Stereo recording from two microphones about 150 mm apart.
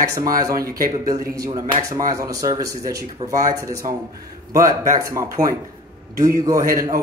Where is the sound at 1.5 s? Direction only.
40° right (ahead or behind).